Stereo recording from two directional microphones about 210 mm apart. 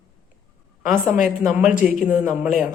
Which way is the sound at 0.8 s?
40° left (ahead or behind).